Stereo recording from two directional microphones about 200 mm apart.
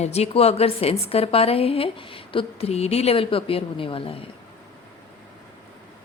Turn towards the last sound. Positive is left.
turn(degrees=30)  # may be behind; listen again after turning